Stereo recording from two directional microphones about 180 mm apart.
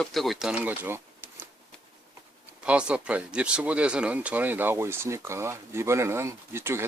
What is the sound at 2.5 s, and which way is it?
Speech, 5° right (ahead or behind).